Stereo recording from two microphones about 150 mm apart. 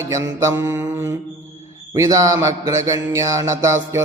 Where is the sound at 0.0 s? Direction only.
20° right (ahead or behind).